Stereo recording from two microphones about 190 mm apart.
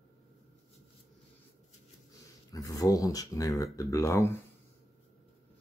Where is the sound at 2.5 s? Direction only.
20° left (ahead or behind).